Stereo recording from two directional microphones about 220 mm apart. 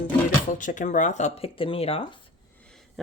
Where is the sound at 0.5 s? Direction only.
35° left (ahead or behind).